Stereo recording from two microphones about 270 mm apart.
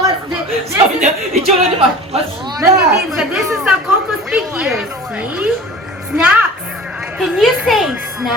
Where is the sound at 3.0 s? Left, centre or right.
Centre.